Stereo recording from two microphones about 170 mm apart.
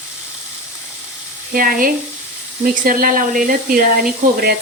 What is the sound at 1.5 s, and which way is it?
Speech, 55° right (ahead or behind).